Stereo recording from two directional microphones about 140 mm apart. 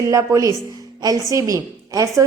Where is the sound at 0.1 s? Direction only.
20° right (ahead or behind).